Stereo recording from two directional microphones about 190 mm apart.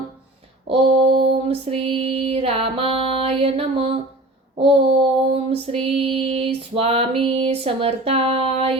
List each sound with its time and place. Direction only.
0.7 s female singing: 30° right (ahead or behind)